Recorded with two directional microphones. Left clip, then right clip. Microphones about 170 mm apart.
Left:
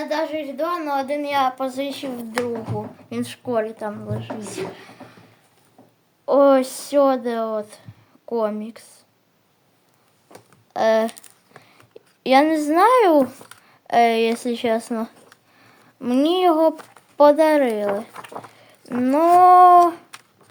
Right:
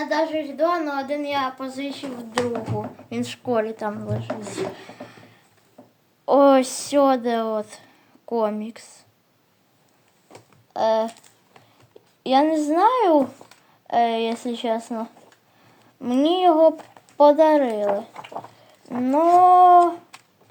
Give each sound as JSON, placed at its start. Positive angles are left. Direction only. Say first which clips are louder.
{"t": 0.1, "sound": "a woman's voice", "louder": "right 2 dB", "side_deg": 40}
{"t": 2.7, "sound": "a woman's voice", "louder": "even", "side_deg": 5}
{"t": 4.7, "sound": "a sound", "louder": "right 2 dB", "side_deg": 0}
{"t": 6.2, "sound": "a woman's voice", "louder": "even", "side_deg": -10}
{"t": 10.8, "sound": "speech", "louder": "left 2 dB", "side_deg": 25}
{"t": 12.2, "sound": "speech", "louder": "left 3 dB", "side_deg": 20}
{"t": 16.0, "sound": "dog", "louder": "left 1 dB", "side_deg": 10}
{"t": 19.0, "sound": "dog", "louder": "left 2 dB", "side_deg": 20}